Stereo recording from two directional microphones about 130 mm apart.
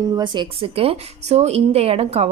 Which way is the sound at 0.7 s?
50° right (ahead or behind).